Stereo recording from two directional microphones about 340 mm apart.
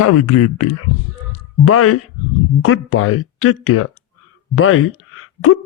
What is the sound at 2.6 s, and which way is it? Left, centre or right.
Speech, left.